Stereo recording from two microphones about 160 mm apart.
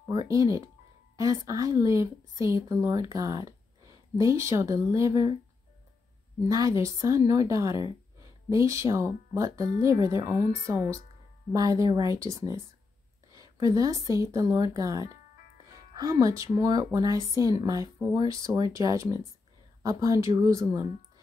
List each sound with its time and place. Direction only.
0.1 s speech: 25° right (ahead or behind)
6.5 s speech: 20° right (ahead or behind)